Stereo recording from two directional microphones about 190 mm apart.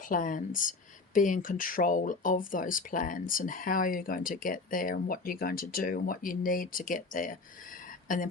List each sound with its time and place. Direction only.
0.0 s speech: 45° left (ahead or behind)